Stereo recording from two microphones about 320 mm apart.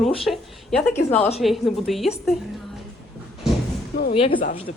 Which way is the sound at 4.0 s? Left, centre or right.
Left.